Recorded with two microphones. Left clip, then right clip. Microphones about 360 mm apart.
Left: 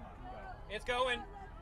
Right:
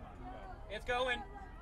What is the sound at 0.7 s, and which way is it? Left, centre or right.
Speech, left.